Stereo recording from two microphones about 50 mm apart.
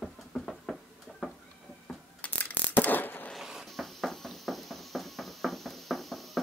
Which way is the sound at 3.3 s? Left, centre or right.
Centre.